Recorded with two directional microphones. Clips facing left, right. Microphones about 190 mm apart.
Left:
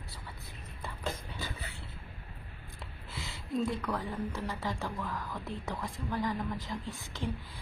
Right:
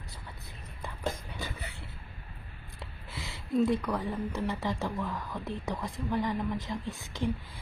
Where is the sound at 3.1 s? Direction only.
20° right (ahead or behind).